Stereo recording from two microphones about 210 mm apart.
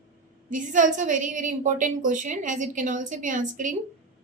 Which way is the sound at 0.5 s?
35° right (ahead or behind).